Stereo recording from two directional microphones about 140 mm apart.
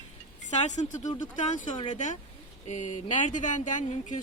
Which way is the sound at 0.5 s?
60° left (ahead or behind).